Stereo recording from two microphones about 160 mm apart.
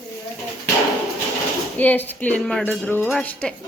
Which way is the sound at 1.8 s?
10° left (ahead or behind).